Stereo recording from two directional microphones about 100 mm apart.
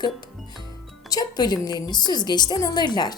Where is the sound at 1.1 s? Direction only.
40° left (ahead or behind).